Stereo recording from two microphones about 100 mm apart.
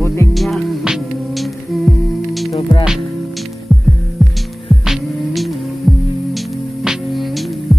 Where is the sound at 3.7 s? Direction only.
Centre (ahead or behind).